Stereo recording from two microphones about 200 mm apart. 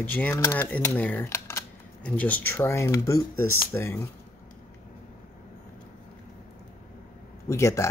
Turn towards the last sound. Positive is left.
turn(degrees=15)  # may be behind; listen again after turning